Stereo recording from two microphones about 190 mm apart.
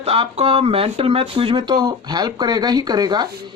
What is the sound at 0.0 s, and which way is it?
Speech, 30° right (ahead or behind).